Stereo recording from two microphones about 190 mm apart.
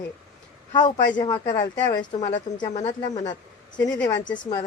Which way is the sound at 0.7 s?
20° left (ahead or behind).